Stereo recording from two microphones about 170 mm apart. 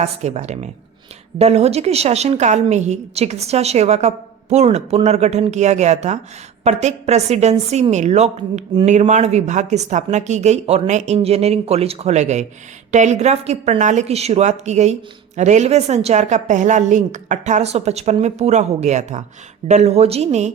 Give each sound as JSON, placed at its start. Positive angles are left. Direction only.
{"t": 0.0, "sound": "a woman's voice", "side_deg": -40}